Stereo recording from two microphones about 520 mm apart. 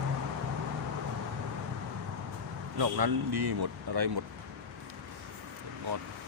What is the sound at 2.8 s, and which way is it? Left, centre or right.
Speech, right.